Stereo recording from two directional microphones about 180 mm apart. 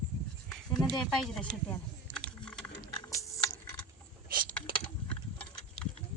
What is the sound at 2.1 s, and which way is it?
Typing, 5° left (ahead or behind).